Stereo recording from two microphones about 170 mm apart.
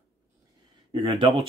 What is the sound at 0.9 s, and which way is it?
Speech, 30° right (ahead or behind).